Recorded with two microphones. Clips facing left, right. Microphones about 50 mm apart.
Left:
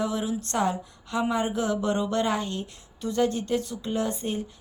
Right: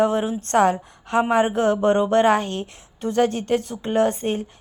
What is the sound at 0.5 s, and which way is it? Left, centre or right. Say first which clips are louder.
A woman's voice: right 10 dB; right.